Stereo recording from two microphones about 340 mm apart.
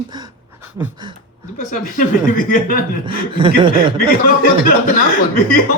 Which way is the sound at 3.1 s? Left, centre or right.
Centre.